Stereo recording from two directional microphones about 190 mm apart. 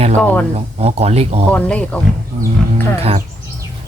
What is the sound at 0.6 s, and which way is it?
Speech, 35° right (ahead or behind).